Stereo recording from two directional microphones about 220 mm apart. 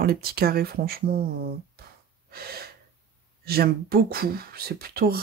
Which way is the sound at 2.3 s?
45° right (ahead or behind).